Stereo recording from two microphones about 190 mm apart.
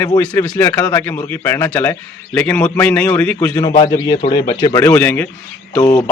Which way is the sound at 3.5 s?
25° left (ahead or behind).